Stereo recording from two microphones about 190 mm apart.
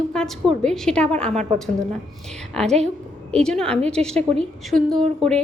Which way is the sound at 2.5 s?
Centre (ahead or behind).